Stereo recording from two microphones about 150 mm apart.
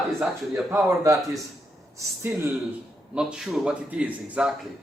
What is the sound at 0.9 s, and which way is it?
Speech, 20° right (ahead or behind).